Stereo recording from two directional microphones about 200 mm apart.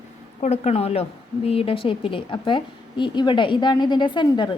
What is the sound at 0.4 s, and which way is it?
A woman's voice, 35° left (ahead or behind).